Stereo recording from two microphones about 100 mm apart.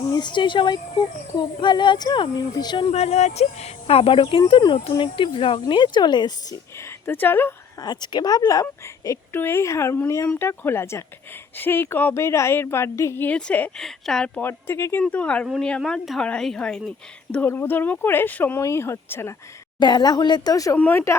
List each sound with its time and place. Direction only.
0.1 s a child's voice: 50° left (ahead or behind)
2.9 s speech: 90° left; by 6.6 s 45° left (ahead or behind)
6.7 s speech: 25° left (ahead or behind)
7.8 s speech: 45° left (ahead or behind)
9.3 s a woman's voice: 25° left (ahead or behind)
13.2 s speech: 15° left (ahead or behind)
14.3 s a woman's voice: 20° left (ahead or behind)
15.0 s speech: 10° left (ahead or behind)
17.4 s a woman's voice: 25° left (ahead or behind)
19.8 s a child's voice: 45° left (ahead or behind)
20.7 s speech: 15° left (ahead or behind)